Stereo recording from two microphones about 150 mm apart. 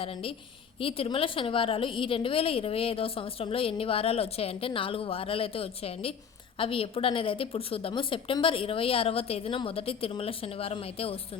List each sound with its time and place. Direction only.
0.0 s a woman's voice: 40° left (ahead or behind)